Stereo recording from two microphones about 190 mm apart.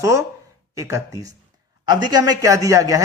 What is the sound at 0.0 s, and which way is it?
A man's voice, 15° right (ahead or behind).